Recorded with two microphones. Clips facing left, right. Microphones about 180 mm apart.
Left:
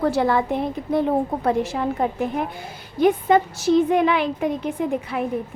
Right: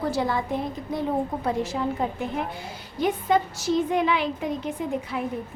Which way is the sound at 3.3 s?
55° left (ahead or behind).